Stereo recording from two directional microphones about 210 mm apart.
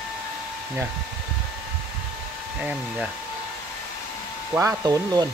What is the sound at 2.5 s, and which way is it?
Speech, 5° right (ahead or behind).